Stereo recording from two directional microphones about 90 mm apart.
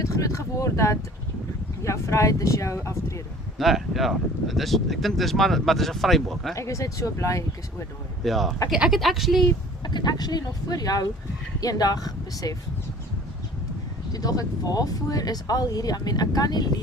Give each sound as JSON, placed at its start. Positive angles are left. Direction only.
{"t": 0.0, "sound": "speech", "side_deg": 35}
{"t": 3.6, "sound": "speech", "side_deg": 0}
{"t": 6.5, "sound": "speech", "side_deg": 35}
{"t": 8.2, "sound": "speech", "side_deg": 0}
{"t": 9.8, "sound": "speech", "side_deg": 55}
{"t": 14.1, "sound": "speech", "side_deg": 45}